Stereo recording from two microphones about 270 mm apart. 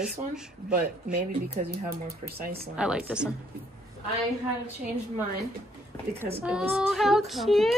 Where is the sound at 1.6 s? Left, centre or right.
Right.